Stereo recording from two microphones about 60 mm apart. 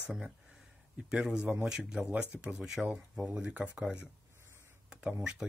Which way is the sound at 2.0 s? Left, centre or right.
Right.